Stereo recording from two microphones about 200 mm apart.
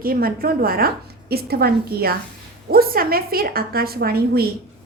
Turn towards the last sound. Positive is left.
turn(degrees=-50)  # may be behind; listen again after turning